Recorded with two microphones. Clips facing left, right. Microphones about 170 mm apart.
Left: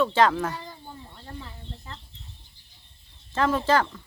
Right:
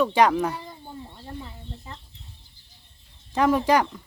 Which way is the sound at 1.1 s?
15° right (ahead or behind).